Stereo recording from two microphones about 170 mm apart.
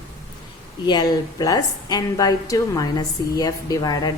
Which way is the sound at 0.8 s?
25° left (ahead or behind).